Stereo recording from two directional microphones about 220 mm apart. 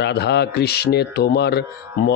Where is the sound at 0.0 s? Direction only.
50° left (ahead or behind).